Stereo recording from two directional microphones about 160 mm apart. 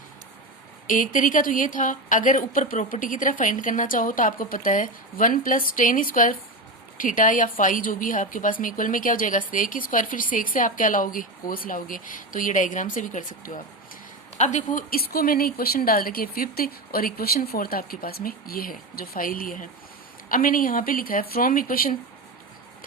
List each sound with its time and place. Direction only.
0.9 s a woman's voice: 55° left (ahead or behind)